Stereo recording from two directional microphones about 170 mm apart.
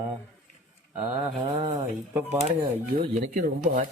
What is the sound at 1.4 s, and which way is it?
Speech, 25° right (ahead or behind).